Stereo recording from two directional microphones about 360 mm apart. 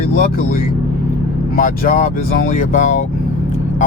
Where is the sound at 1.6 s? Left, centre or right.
Left.